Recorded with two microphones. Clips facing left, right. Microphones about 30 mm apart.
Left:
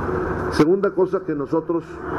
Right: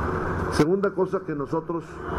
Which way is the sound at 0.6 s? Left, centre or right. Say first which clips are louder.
Left 5 dB; centre.